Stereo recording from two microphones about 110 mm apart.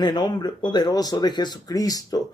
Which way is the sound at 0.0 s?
40° left (ahead or behind).